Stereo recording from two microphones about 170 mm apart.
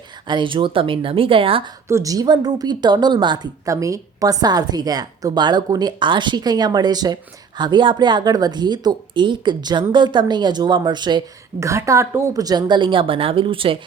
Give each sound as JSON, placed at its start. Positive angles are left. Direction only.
{"t": 0.3, "sound": "speech", "side_deg": -30}
{"t": 1.9, "sound": "a woman's voice", "side_deg": -20}